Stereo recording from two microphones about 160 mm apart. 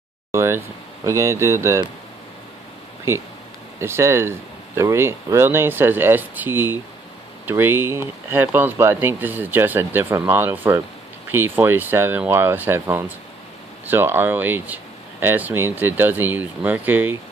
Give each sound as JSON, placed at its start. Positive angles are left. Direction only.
{"t": 0.3, "sound": "a sound", "side_deg": -15}
{"t": 1.0, "sound": "speech", "side_deg": -20}
{"t": 3.8, "sound": "speech", "side_deg": -15}